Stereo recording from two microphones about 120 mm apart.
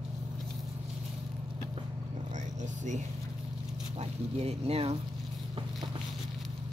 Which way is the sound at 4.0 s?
60° right (ahead or behind).